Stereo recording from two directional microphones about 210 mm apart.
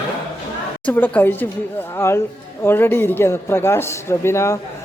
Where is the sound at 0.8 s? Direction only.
10° left (ahead or behind).